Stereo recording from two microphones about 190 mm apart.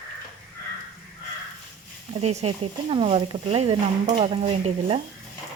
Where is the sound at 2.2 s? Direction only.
35° right (ahead or behind).